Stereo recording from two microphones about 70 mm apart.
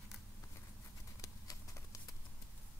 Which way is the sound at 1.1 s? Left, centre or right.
Left.